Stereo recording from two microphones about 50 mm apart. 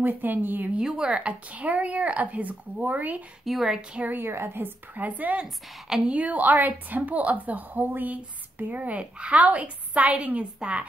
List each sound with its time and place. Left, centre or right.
0.0 s a woman's voice: right
0.7 s speech: centre; by 3.2 s right
3.4 s a woman's voice: centre
4.0 s a woman's voice: right
4.3 s a woman's voice: right
5.4 s a woman's voice: centre
6.0 s a woman's voice: right